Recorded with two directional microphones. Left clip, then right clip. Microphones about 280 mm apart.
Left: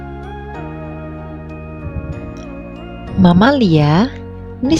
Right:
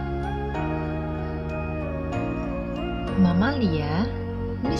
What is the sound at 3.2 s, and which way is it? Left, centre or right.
Speech, left.